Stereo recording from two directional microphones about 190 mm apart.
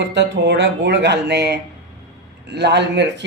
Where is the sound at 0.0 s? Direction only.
65° right (ahead or behind).